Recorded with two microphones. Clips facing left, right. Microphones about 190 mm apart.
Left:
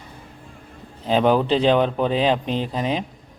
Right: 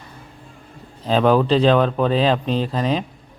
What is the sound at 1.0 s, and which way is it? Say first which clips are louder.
Speech: right 2 dB; 15° left (ahead or behind).